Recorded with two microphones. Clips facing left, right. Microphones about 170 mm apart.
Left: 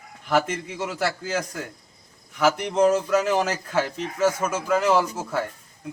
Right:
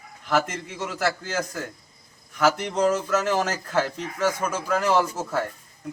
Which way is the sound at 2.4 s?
10° left (ahead or behind).